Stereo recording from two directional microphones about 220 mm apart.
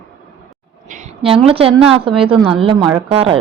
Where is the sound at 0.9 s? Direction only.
30° right (ahead or behind).